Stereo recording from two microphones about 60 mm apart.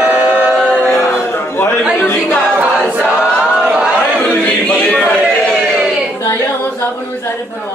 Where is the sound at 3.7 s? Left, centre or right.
Right.